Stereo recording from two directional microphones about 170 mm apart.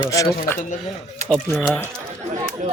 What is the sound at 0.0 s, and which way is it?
Speech, 20° left (ahead or behind).